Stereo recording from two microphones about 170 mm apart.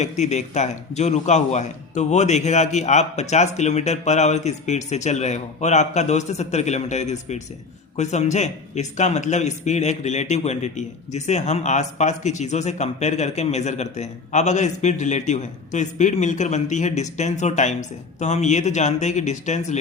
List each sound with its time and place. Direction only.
0.0 s speech: 40° left (ahead or behind)